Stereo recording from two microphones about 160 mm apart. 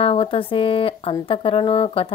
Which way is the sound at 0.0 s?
35° left (ahead or behind).